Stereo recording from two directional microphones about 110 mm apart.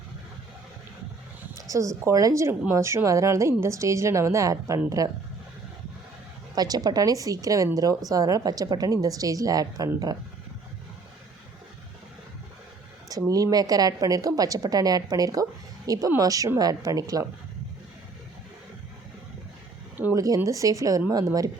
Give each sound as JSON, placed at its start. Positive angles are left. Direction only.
{"t": 1.5, "sound": "a woman's voice", "side_deg": -30}
{"t": 6.6, "sound": "a woman's voice", "side_deg": -35}
{"t": 13.1, "sound": "a woman's voice", "side_deg": -35}
{"t": 20.1, "sound": "a woman's voice", "side_deg": -30}